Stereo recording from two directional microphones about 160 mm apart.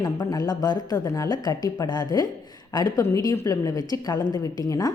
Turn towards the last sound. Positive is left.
turn(degrees=25)  # may be behind; listen again after turning